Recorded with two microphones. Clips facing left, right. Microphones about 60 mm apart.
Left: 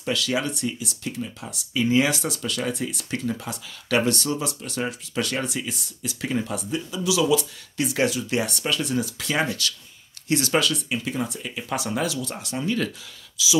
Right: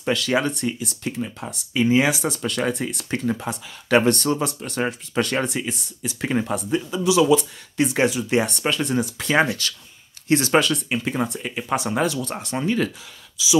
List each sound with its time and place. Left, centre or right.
0.0 s speech: right
5.6 s speech: right
6.2 s speech: right
13.4 s speech: right